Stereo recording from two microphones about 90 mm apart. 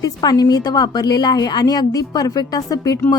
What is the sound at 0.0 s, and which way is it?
Speech, 45° left (ahead or behind).